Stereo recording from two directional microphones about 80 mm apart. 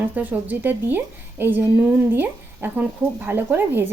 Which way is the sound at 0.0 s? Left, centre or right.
Right.